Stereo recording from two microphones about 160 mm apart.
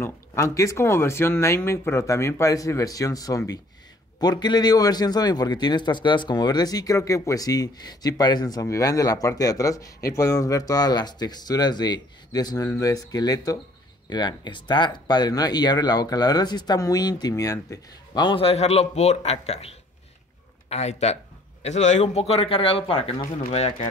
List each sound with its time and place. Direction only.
0.4 s a man's voice: 20° left (ahead or behind); by 19.7 s 40° left (ahead or behind)
20.7 s speech: 40° left (ahead or behind)